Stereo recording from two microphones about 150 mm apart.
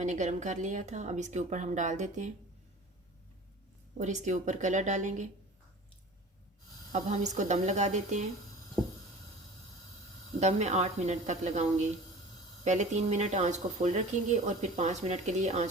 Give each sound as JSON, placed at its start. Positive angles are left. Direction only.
{"t": 0.0, "sound": "speech", "side_deg": -50}
{"t": 3.9, "sound": "speech", "side_deg": -50}
{"t": 6.9, "sound": "speech", "side_deg": -50}
{"t": 10.4, "sound": "speech", "side_deg": -50}